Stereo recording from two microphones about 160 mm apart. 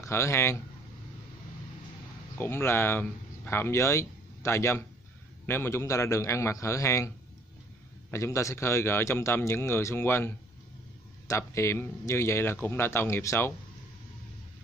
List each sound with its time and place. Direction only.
0.0 s speech: 15° left (ahead or behind)
2.3 s a man's voice: 15° left (ahead or behind)
8.1 s a man's voice: 20° left (ahead or behind)